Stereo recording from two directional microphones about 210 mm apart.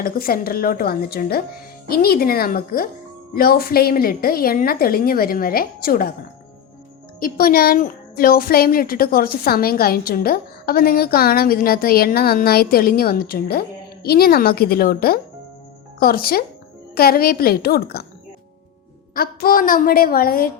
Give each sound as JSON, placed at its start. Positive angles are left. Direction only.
{"t": 0.0, "sound": "speech", "side_deg": 45}
{"t": 7.2, "sound": "speech", "side_deg": 45}
{"t": 19.1, "sound": "speech", "side_deg": 45}